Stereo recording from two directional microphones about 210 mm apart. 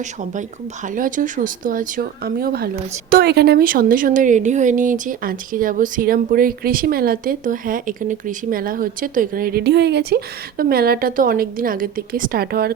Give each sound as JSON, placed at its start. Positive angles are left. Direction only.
{"t": 0.0, "sound": "a woman's voice", "side_deg": -35}